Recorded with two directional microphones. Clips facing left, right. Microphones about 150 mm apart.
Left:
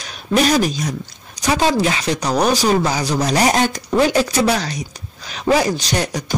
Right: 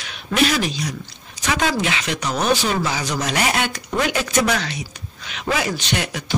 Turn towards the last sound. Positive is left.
turn(degrees=40)  # may be behind; listen again after turning